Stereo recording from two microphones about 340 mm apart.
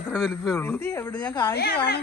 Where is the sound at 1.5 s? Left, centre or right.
Left.